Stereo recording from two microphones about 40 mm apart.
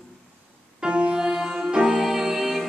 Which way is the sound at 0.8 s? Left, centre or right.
Right.